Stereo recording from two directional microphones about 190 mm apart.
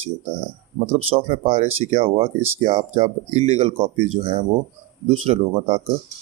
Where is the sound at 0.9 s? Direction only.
30° right (ahead or behind).